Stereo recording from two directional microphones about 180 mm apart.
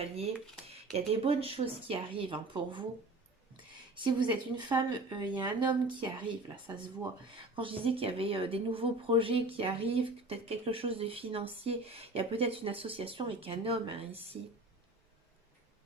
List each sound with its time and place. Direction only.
0.9 s speech: 35° right (ahead or behind)
3.9 s speech: 25° right (ahead or behind)
7.5 s speech: 30° right (ahead or behind)